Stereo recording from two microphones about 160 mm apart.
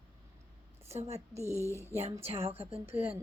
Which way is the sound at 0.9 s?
40° right (ahead or behind).